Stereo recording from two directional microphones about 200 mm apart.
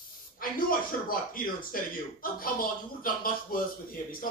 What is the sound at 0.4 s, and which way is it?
A man's voice, 45° left (ahead or behind).